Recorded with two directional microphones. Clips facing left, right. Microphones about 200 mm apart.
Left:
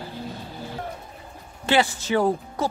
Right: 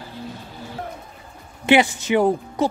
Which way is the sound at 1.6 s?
15° right (ahead or behind).